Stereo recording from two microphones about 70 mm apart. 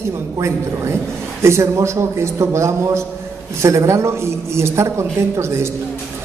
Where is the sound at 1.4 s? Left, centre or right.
Right.